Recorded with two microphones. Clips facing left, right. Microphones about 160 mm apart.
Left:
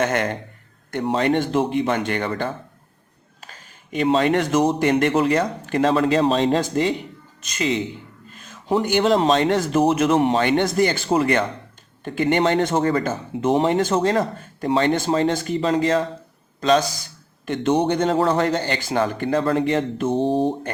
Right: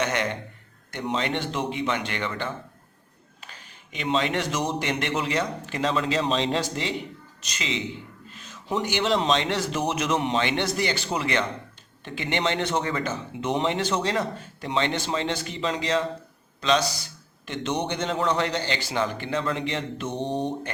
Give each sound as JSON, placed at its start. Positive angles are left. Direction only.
{"t": 0.0, "sound": "a man's voice", "side_deg": 50}